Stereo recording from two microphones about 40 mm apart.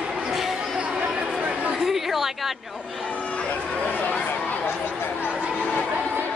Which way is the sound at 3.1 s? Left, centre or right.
Left.